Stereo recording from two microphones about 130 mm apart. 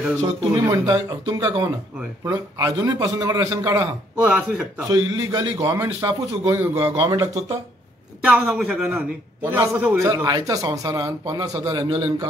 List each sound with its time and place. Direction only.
0.2 s a man's voice: 30° right (ahead or behind)
4.2 s a man's voice: 10° right (ahead or behind)
4.8 s a man's voice: 30° right (ahead or behind)
8.2 s a man's voice: 5° right (ahead or behind)
8.8 s a man's voice: 15° right (ahead or behind)
10.0 s a man's voice: 30° right (ahead or behind)